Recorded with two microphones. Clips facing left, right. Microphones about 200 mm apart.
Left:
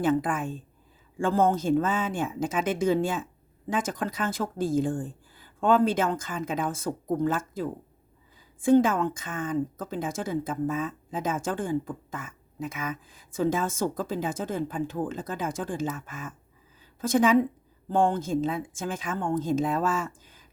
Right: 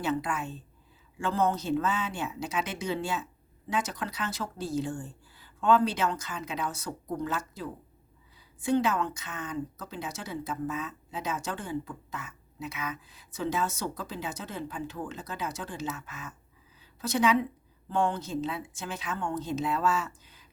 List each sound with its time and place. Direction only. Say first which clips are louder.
0.0 s speech: left 6 dB; 50° left (ahead or behind)